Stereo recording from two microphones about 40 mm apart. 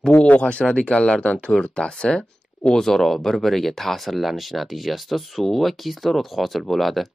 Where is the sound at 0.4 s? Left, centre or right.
Left.